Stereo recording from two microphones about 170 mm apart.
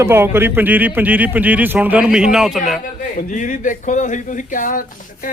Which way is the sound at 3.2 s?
50° left (ahead or behind).